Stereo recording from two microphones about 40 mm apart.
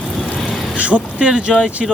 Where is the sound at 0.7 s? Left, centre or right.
Right.